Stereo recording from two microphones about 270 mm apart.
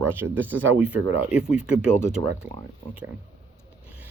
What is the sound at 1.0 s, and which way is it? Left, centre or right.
Speech, right.